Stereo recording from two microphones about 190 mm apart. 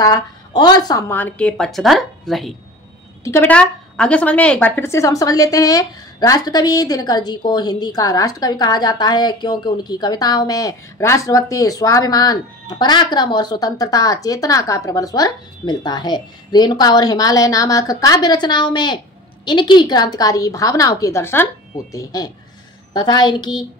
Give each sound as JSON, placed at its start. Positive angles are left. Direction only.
{"t": 0.0, "sound": "a woman's voice", "side_deg": 20}